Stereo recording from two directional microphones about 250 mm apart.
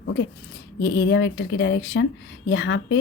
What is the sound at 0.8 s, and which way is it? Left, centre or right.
Speech, left.